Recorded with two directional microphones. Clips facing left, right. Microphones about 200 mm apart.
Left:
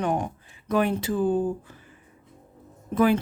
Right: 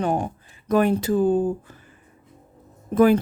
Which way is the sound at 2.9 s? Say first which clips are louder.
Right 5 dB; 45° right (ahead or behind).